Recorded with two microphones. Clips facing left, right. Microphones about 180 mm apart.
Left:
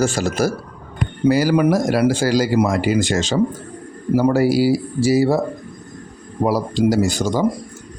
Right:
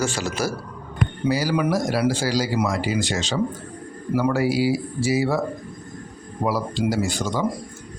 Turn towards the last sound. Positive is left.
turn(degrees=40)  # may be behind; listen again after turning